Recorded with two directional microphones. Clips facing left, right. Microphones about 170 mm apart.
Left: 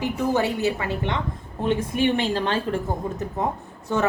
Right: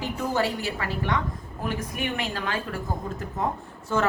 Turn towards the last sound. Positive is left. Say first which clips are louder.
# left 2 dB
turn(degrees=20)  # may be behind; listen again after turning